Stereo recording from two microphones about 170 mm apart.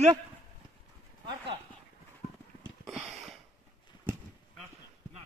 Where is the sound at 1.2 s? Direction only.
30° right (ahead or behind).